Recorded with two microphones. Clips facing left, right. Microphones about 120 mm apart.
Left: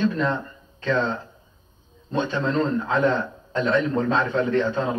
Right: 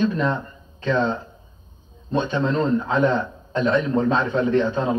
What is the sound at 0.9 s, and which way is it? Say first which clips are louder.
Speech: right 2 dB; 20° right (ahead or behind).